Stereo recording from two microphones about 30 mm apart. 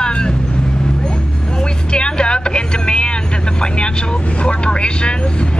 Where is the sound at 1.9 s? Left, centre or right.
Left.